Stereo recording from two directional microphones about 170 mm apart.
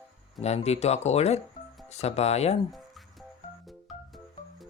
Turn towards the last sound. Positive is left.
turn(degrees=0)  # may be behind; listen again after turning